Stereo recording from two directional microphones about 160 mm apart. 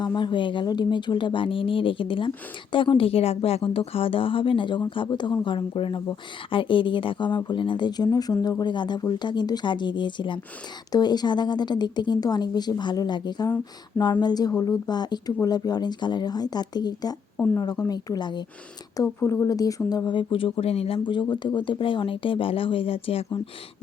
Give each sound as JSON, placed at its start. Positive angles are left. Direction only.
{"t": 0.0, "sound": "a woman's voice", "side_deg": 30}
{"t": 17.3, "sound": "speech", "side_deg": 10}
{"t": 17.6, "sound": "a woman's voice", "side_deg": 25}